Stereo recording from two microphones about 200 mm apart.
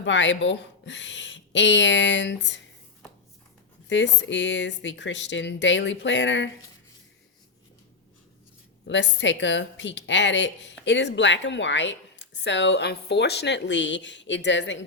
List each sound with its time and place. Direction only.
0.0 s a woman's voice: 65° left (ahead or behind)
3.8 s a woman's voice: 65° left (ahead or behind)
8.9 s a woman's voice: 65° left (ahead or behind)